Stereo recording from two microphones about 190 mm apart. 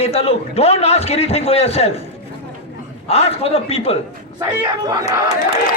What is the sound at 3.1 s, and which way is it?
Speech, 35° left (ahead or behind).